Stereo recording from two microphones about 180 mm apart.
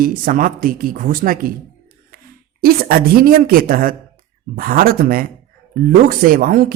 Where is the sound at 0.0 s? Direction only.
50° right (ahead or behind).